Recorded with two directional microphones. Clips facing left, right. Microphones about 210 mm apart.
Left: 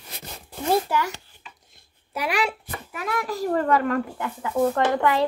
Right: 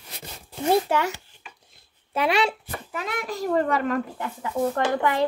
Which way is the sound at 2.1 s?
25° right (ahead or behind).